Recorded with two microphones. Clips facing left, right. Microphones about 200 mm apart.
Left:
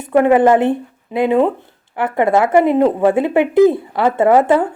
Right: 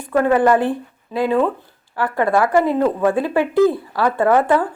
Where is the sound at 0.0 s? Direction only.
20° left (ahead or behind).